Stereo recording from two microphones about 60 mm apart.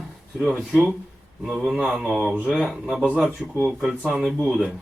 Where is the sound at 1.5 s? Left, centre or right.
Centre.